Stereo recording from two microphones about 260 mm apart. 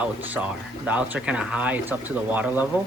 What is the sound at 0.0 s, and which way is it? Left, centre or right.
Speech, centre.